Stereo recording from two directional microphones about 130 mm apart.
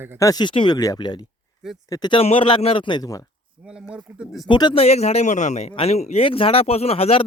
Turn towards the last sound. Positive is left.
turn(degrees=50)  # may be behind; listen again after turning